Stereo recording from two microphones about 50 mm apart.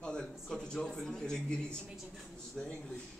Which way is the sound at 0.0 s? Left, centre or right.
Centre.